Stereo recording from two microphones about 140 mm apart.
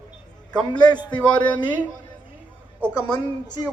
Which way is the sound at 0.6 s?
30° left (ahead or behind).